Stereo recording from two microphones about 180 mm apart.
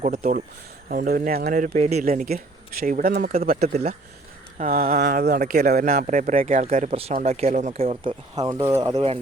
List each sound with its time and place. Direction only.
0.0 s speech: 45° right (ahead or behind)
2.0 s speech: 55° right (ahead or behind)
5.9 s speech: 45° right (ahead or behind); by 9.0 s 15° right (ahead or behind)